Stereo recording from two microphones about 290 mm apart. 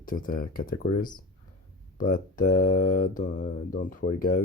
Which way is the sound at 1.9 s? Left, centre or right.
Left.